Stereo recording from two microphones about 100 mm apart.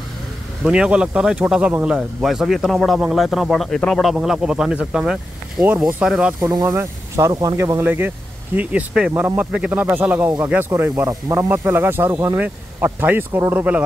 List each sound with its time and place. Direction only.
0.7 s speech: 10° right (ahead or behind)
2.0 s speech: 5° right (ahead or behind)
6.6 s speech: 25° right (ahead or behind)